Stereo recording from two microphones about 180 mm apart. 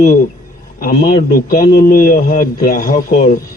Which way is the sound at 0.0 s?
50° left (ahead or behind).